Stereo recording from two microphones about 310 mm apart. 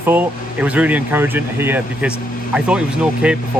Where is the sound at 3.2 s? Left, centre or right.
Centre.